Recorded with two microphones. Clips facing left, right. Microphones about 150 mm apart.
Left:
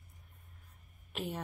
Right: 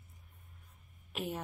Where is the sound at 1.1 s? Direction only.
Centre (ahead or behind).